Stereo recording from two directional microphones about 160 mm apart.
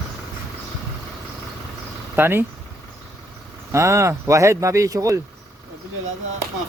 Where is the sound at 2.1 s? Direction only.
15° right (ahead or behind).